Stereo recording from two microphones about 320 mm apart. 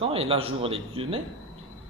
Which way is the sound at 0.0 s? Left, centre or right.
Centre.